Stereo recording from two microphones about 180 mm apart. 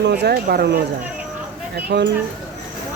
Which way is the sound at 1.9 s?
70° right (ahead or behind).